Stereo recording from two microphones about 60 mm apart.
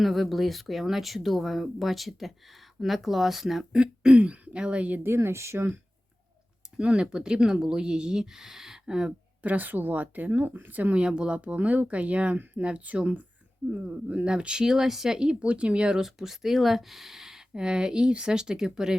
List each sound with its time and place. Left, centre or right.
0.0 s speech: centre
3.7 s speech: centre
5.0 s speech: right
6.7 s speech: centre
9.4 s speech: right
11.0 s speech: centre
14.7 s speech: centre